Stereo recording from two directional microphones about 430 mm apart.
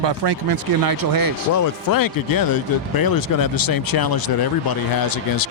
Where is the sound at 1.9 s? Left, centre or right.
Left.